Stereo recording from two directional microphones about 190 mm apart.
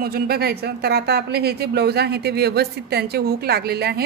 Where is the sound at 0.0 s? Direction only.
55° right (ahead or behind).